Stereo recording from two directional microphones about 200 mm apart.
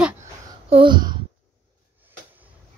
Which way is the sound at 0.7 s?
25° right (ahead or behind).